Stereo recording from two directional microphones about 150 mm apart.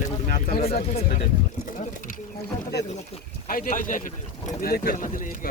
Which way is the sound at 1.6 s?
65° left (ahead or behind).